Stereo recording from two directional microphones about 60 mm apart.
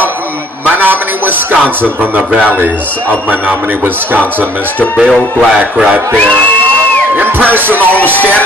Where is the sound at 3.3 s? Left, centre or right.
Right.